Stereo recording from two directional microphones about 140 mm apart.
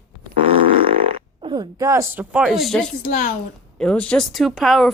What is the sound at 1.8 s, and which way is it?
Speech, 20° right (ahead or behind).